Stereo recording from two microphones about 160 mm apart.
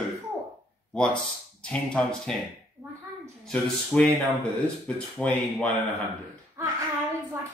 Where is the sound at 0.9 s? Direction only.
5° left (ahead or behind).